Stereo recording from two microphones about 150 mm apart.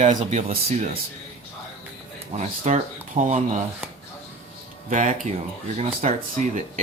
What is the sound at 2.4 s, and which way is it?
Speech, 55° right (ahead or behind).